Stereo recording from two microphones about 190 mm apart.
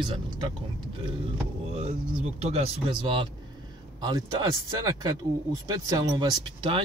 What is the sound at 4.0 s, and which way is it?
Speech, 20° right (ahead or behind).